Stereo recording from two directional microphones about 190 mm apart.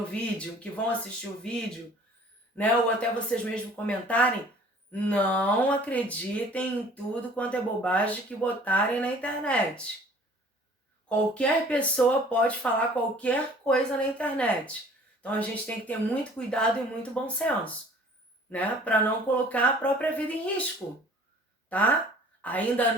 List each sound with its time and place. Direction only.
0.1 s speech: 5° left (ahead or behind)
11.1 s speech: 5° left (ahead or behind)
21.7 s a woman's voice: 10° left (ahead or behind)